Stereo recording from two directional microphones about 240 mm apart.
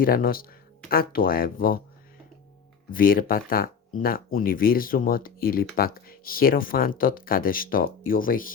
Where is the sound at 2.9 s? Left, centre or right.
Left.